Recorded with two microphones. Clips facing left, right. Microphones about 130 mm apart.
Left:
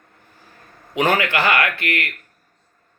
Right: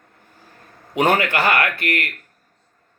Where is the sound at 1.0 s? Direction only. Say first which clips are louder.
Right 1 dB; 30° right (ahead or behind).